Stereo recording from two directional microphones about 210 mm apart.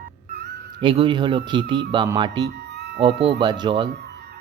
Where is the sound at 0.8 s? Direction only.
25° right (ahead or behind).